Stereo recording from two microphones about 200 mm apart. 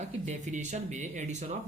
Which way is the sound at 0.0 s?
35° right (ahead or behind).